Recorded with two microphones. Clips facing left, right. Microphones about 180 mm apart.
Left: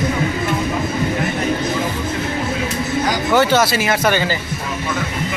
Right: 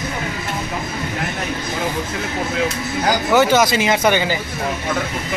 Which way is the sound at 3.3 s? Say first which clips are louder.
Even; 10° right (ahead or behind).